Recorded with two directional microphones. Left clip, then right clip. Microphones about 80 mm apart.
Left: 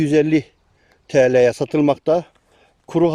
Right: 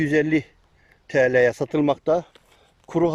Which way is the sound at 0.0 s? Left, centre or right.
Left.